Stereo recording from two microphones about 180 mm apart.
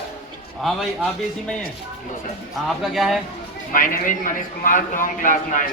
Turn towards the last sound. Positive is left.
turn(degrees=45)  # may be behind; listen again after turning